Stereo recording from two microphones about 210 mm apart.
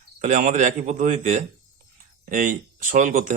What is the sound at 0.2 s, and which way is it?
Speech, 40° right (ahead or behind).